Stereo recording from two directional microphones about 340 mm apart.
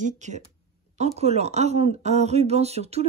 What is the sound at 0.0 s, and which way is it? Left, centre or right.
Speech, right.